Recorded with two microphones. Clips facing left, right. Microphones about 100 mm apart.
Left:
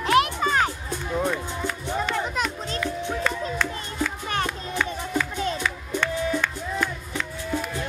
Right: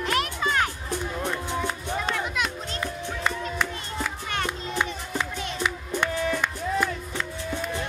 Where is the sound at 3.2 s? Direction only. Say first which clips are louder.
Right 3 dB; 15° right (ahead or behind).